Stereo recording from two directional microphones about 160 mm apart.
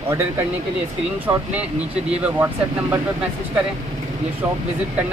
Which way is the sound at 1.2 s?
10° right (ahead or behind).